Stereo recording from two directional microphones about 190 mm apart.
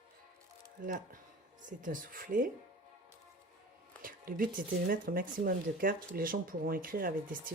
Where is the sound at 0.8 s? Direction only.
45° right (ahead or behind).